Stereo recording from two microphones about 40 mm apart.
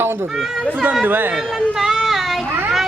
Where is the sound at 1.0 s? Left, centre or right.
Right.